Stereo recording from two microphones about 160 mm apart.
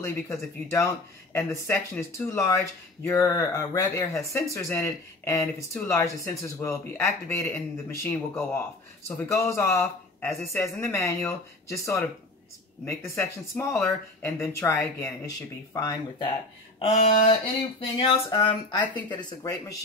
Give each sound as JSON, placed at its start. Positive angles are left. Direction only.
{"t": 0.0, "sound": "speech", "side_deg": 20}
{"t": 16.9, "sound": "a sound", "side_deg": 40}
{"t": 17.7, "sound": "speech", "side_deg": 35}